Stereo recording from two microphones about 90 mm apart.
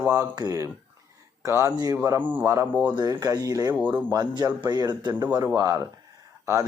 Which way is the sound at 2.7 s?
10° right (ahead or behind).